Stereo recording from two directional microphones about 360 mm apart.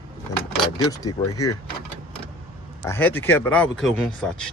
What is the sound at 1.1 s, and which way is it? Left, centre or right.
Speech, left.